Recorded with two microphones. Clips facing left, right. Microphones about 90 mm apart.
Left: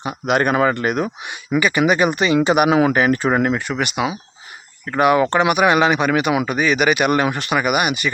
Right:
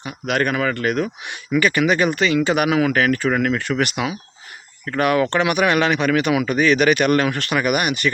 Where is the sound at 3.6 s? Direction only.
10° left (ahead or behind).